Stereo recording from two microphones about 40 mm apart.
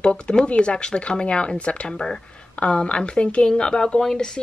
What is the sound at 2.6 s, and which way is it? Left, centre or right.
Speech, left.